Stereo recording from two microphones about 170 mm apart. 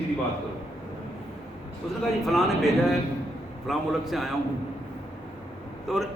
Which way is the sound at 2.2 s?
Centre (ahead or behind).